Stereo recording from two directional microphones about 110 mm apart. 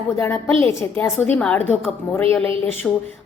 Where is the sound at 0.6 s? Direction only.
25° left (ahead or behind).